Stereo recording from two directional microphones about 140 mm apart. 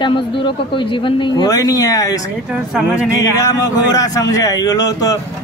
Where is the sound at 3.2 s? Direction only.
25° left (ahead or behind).